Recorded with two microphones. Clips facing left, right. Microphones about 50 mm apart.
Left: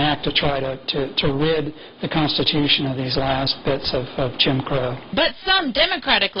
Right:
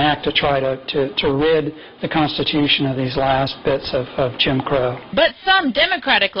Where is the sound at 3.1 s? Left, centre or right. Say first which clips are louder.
Right 5 dB; centre.